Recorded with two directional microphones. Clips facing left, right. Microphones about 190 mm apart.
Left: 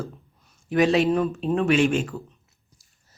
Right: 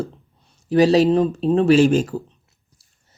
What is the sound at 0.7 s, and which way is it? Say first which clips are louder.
Speech: right 5 dB; 35° right (ahead or behind).